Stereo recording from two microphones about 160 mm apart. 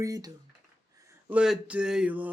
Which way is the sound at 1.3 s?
5° right (ahead or behind).